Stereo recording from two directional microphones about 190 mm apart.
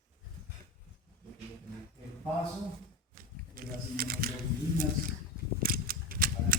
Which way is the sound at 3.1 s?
50° right (ahead or behind).